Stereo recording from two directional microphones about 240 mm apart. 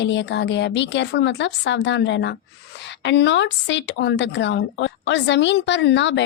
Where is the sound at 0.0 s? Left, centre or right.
Left.